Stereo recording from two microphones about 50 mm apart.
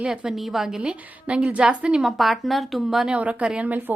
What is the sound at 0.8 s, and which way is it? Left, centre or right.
A woman's voice, right.